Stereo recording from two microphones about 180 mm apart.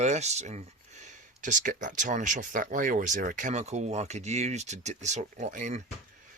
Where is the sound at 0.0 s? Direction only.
40° right (ahead or behind).